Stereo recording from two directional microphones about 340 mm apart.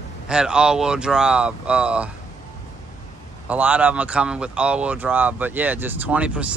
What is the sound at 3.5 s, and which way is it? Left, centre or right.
Speech, centre.